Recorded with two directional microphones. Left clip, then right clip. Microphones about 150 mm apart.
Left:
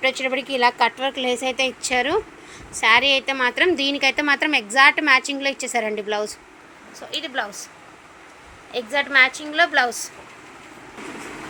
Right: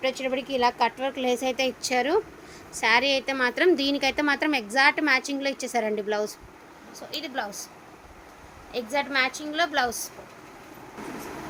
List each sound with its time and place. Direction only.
0.0 s a woman's voice: 5° right (ahead or behind)
7.1 s a woman's voice: 10° left (ahead or behind)
8.7 s a woman's voice: 10° left (ahead or behind)